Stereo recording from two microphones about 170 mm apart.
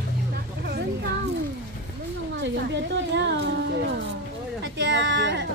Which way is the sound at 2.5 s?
90° right.